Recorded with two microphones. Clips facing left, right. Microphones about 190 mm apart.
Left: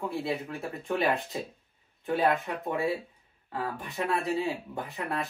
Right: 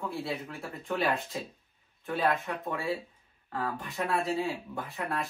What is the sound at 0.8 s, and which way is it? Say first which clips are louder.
Speech: left 2 dB; 20° left (ahead or behind).